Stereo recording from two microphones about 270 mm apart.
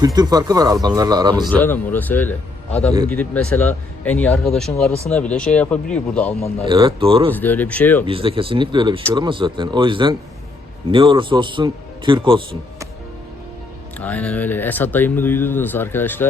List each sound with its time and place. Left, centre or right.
0.0 s speech: centre
1.5 s speech: centre
6.7 s speech: centre
7.3 s speech: centre
8.0 s speech: centre
14.0 s speech: centre